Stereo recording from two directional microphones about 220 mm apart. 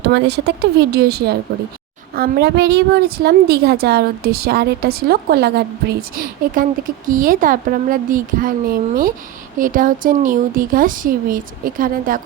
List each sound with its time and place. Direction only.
0.1 s a woman's voice: 50° right (ahead or behind)